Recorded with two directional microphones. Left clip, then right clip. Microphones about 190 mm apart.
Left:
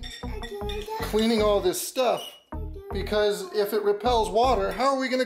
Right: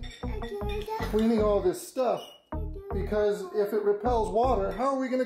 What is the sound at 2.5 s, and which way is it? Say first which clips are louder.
Music: even; 10° right (ahead or behind).